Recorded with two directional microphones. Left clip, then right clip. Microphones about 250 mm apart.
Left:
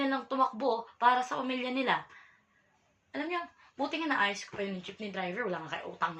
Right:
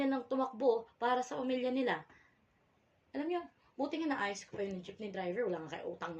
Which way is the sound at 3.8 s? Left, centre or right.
Centre.